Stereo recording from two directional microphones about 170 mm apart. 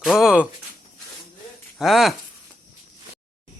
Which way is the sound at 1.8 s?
Centre (ahead or behind).